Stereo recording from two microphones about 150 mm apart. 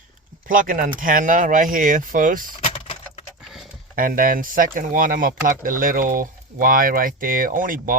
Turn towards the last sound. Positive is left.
turn(degrees=-65)  # may be behind; listen again after turning